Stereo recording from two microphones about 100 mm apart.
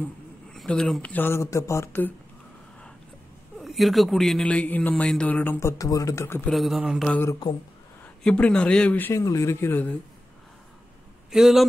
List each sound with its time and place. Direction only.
0.0 s a sound: 10° left (ahead or behind)
1.0 s speech: 20° left (ahead or behind)
1.9 s speech: 20° left (ahead or behind)
3.5 s speech: centre (ahead or behind)
4.5 s speech: 15° left (ahead or behind)
6.5 s speech: centre (ahead or behind)
8.2 s speech: 10° left (ahead or behind)
9.1 s speech: 30° left (ahead or behind)
11.3 s speech: 5° right (ahead or behind)